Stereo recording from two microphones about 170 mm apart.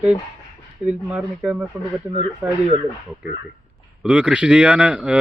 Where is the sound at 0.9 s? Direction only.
5° right (ahead or behind).